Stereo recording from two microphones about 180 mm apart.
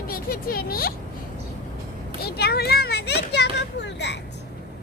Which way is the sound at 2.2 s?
60° left (ahead or behind).